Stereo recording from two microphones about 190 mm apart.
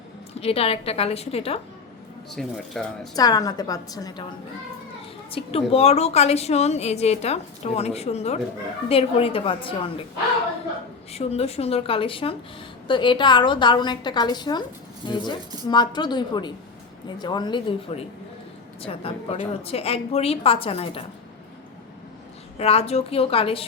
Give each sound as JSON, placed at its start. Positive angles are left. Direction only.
{"t": 0.3, "sound": "a woman's voice", "side_deg": 30}
{"t": 2.3, "sound": "speech", "side_deg": 0}
{"t": 3.2, "sound": "a woman's voice", "side_deg": 20}
{"t": 5.3, "sound": "a woman's voice", "side_deg": 30}
{"t": 11.1, "sound": "a woman's voice", "side_deg": 30}
{"t": 22.5, "sound": "a woman's voice", "side_deg": 30}